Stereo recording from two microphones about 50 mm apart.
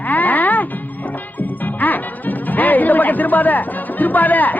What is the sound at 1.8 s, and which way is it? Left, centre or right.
A woman's voice, left.